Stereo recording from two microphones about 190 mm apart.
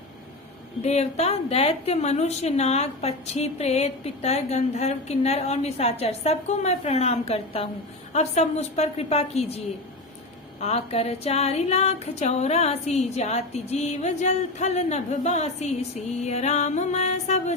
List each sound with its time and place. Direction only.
0.8 s a woman's voice: 35° left (ahead or behind)
10.6 s a woman's voice: 35° left (ahead or behind)